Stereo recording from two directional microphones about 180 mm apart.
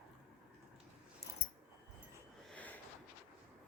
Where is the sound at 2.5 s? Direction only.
10° left (ahead or behind).